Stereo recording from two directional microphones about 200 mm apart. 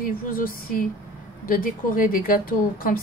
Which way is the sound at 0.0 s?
45° left (ahead or behind).